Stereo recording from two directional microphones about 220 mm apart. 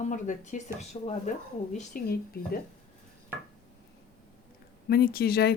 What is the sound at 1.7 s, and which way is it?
Speech, 40° left (ahead or behind).